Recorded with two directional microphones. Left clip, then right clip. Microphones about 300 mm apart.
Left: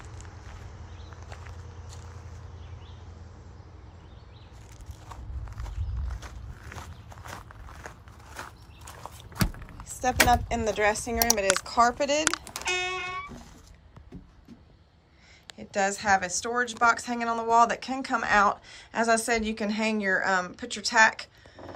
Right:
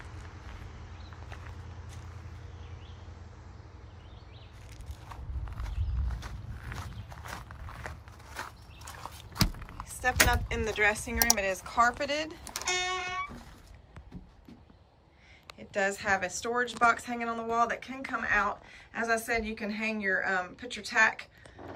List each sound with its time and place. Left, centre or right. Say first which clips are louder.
5.5 s walk: even; centre
10.2 s speech: left 6 dB; centre
12.5 s music: left 2 dB; left
15.5 s a woman's voice: left 3 dB; centre